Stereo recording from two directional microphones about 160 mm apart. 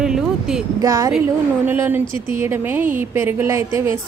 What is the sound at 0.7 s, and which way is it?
A woman's voice, 20° right (ahead or behind).